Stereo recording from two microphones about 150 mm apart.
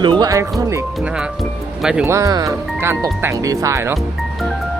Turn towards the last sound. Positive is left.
turn(degrees=-20)  # may be behind; listen again after turning